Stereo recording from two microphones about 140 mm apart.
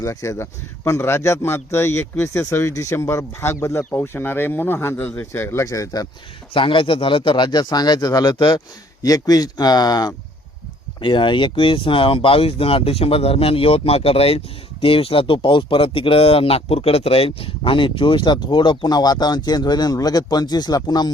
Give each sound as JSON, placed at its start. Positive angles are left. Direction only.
{"t": 0.0, "sound": "a man's voice", "side_deg": 20}
{"t": 6.5, "sound": "speech", "side_deg": 35}